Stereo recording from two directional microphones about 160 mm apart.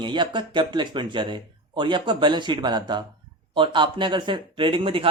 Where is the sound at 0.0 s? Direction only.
30° right (ahead or behind).